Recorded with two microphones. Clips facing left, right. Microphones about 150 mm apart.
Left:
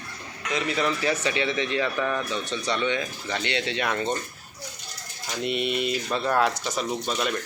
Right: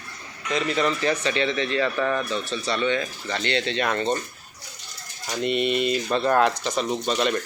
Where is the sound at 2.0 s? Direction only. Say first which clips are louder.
Right 3 dB; 15° right (ahead or behind).